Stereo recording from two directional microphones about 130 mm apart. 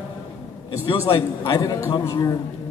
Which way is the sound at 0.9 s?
40° left (ahead or behind).